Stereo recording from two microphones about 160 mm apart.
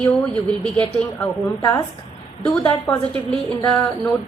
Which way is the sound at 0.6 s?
10° left (ahead or behind).